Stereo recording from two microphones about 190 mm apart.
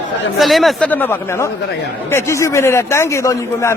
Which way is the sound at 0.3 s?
Centre (ahead or behind).